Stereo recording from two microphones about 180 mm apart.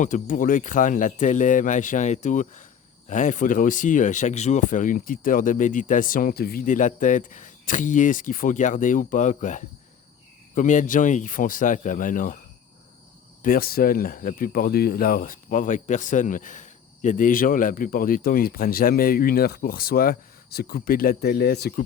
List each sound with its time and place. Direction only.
0.0 s speech: 45° left (ahead or behind)
13.4 s speech: 55° left (ahead or behind)